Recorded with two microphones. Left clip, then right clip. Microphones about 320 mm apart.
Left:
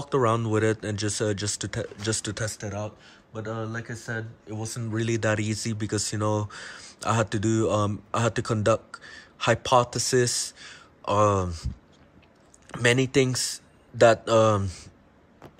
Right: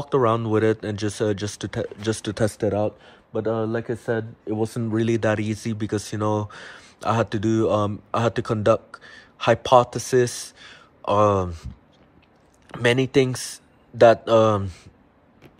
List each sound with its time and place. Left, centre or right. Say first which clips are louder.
0.0 s speech: right 4 dB; centre
2.5 s speech: right 11 dB; centre